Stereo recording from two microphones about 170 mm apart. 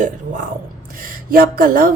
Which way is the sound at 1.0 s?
55° right (ahead or behind).